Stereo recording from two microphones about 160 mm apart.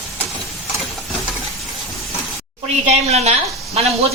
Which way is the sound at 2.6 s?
40° right (ahead or behind).